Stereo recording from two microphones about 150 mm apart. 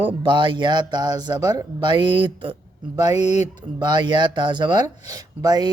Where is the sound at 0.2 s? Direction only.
35° right (ahead or behind).